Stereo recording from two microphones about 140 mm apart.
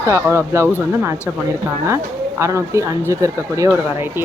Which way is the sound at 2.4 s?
20° right (ahead or behind).